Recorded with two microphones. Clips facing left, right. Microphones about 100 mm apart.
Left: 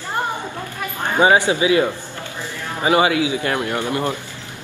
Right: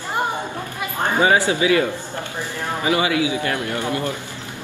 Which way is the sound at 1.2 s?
25° left (ahead or behind).